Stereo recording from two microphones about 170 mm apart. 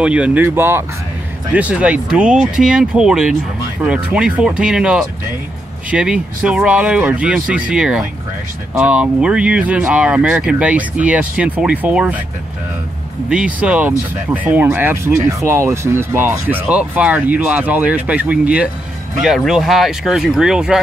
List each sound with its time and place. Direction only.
0.0 s speech: 5° right (ahead or behind)
13.3 s speech: 5° right (ahead or behind)